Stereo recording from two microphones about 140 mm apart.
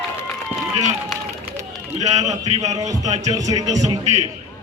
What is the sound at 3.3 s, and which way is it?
Speech, 25° right (ahead or behind).